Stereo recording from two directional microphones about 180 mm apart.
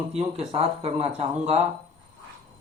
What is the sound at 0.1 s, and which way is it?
Speech, 35° right (ahead or behind).